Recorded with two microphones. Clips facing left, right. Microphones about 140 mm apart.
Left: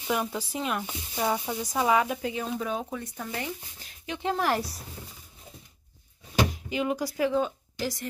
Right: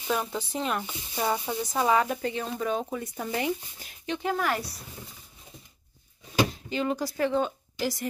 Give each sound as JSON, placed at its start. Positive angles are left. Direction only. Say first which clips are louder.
{"t": 0.1, "sound": "speech", "louder": "even", "side_deg": 10}
{"t": 3.2, "sound": "speech", "louder": "right 9 dB", "side_deg": -15}
{"t": 4.2, "sound": "speech", "louder": "left 2 dB", "side_deg": 30}
{"t": 6.5, "sound": "speech", "louder": "even", "side_deg": 10}